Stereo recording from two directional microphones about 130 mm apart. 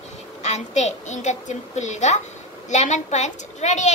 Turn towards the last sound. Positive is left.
turn(degrees=65)  # may be behind; listen again after turning